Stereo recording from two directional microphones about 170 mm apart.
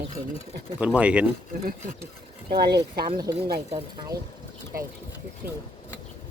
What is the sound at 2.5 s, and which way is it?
Speech, 70° right (ahead or behind).